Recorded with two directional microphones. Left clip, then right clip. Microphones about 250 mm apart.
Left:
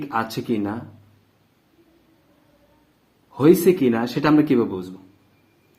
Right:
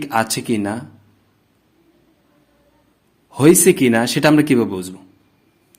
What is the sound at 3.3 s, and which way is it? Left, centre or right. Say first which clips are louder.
A man's voice: right 3 dB; right.